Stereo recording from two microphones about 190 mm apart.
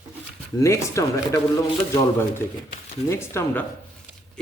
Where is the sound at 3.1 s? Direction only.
15° left (ahead or behind).